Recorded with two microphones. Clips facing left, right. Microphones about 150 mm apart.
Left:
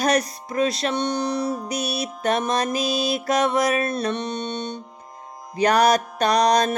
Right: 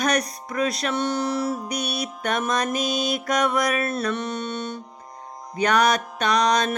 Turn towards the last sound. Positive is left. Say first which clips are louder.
# left 2 dB
turn(degrees=35)  # may be behind; listen again after turning